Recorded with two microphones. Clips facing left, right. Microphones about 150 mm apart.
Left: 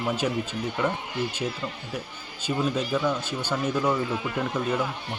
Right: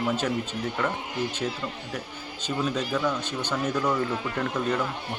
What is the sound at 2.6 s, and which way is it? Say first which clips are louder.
Speech: left 1 dB; 10° left (ahead or behind).